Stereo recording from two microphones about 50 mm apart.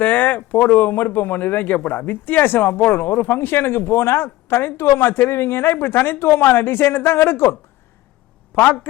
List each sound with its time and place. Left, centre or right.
0.0 s speech: left
8.5 s speech: left